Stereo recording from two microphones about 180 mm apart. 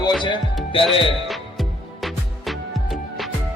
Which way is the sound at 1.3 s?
Centre (ahead or behind).